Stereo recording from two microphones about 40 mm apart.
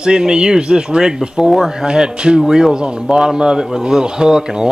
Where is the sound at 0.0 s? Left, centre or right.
Right.